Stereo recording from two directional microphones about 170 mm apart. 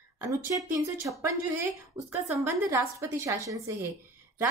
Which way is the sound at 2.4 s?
15° right (ahead or behind).